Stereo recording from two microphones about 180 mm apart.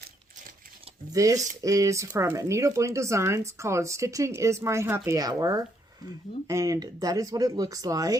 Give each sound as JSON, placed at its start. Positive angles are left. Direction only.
{"t": 1.1, "sound": "speech", "side_deg": -20}